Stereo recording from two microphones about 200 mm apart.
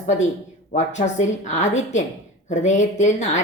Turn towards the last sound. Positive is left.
turn(degrees=35)  # may be behind; listen again after turning